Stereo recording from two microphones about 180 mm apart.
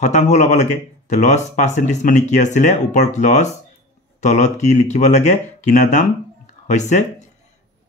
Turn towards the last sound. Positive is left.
turn(degrees=40)  # may be behind; listen again after turning